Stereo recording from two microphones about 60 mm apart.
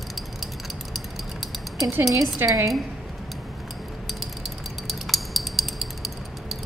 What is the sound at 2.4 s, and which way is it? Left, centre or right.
Speech, right.